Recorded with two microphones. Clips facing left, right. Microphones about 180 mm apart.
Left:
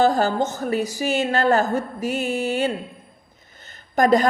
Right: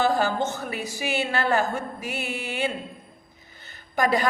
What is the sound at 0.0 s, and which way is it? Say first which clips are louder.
A woman's voice: left 4 dB; 45° left (ahead or behind).